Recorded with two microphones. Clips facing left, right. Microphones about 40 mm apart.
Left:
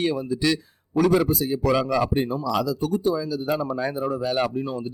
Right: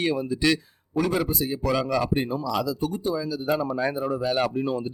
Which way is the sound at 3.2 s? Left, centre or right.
Right.